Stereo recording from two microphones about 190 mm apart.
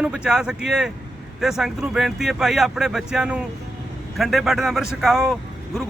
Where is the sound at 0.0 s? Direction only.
5° right (ahead or behind).